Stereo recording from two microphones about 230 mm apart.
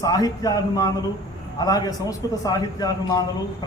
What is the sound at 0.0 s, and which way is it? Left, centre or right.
A man's voice, centre.